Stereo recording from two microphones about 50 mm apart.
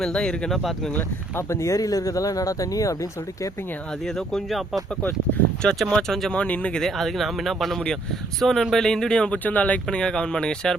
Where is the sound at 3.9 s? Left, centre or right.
Centre.